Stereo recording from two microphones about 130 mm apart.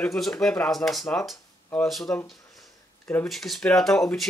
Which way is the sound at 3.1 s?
5° left (ahead or behind).